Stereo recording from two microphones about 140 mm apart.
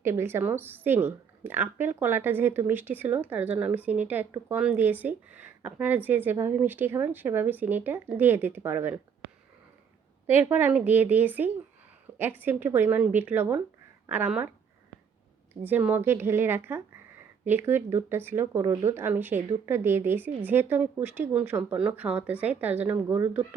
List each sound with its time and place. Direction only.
0.0 s a woman's voice: 15° right (ahead or behind)
10.2 s a woman's voice: 15° right (ahead or behind)
15.6 s a woman's voice: 10° right (ahead or behind)